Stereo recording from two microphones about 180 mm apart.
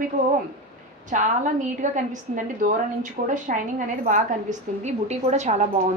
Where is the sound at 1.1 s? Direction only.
45° right (ahead or behind).